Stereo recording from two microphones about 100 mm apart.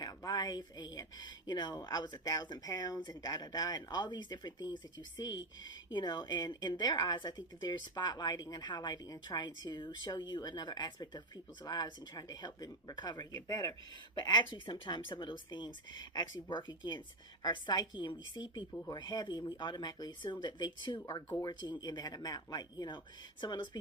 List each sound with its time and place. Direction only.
0.0 s speech: 40° left (ahead or behind)